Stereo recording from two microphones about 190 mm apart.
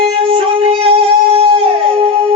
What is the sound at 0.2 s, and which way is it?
Music, 30° right (ahead or behind).